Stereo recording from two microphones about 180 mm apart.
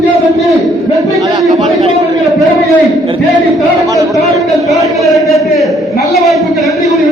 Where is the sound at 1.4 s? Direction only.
40° right (ahead or behind).